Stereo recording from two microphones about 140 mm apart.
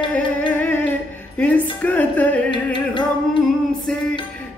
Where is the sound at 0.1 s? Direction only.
10° left (ahead or behind).